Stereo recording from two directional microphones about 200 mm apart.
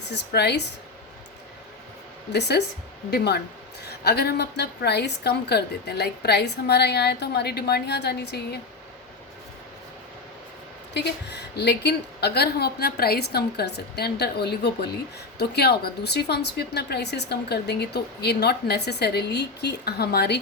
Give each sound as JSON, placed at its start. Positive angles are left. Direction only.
{"t": 0.1, "sound": "a woman's voice", "side_deg": 55}
{"t": 2.3, "sound": "a woman's voice", "side_deg": 55}
{"t": 10.9, "sound": "a woman's voice", "side_deg": 55}